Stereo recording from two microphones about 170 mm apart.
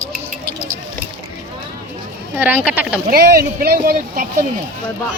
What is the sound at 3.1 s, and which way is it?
Speech, 65° right (ahead or behind).